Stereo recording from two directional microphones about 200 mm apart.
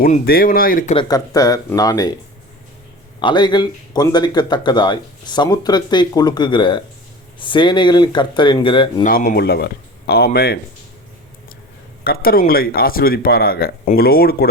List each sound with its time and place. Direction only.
0.0 s speech: 45° left (ahead or behind)
0.9 s speech: 20° left (ahead or behind)
3.2 s speech: 20° left (ahead or behind)
9.0 s speech: 45° left (ahead or behind)
12.0 s speech: 50° left (ahead or behind)